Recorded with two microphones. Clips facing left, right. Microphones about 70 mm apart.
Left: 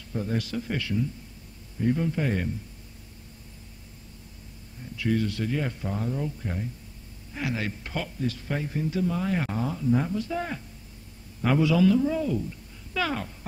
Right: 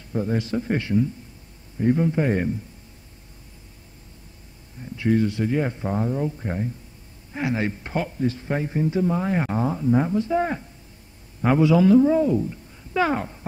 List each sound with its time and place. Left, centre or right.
0.1 s a man's voice: right
4.9 s a man's voice: right